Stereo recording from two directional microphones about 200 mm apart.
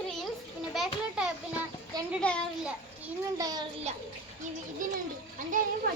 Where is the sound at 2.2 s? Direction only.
5° left (ahead or behind).